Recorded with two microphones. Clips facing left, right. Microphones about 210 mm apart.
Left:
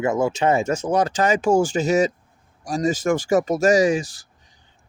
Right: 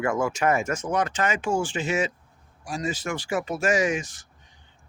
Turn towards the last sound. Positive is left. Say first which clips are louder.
# left 6 dB
turn(degrees=35)  # may be behind; listen again after turning